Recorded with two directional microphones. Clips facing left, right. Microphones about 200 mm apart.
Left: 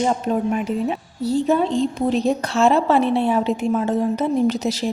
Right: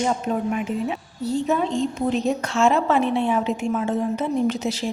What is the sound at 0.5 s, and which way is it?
A woman's voice, 35° left (ahead or behind).